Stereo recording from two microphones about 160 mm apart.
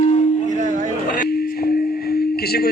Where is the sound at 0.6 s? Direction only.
50° right (ahead or behind).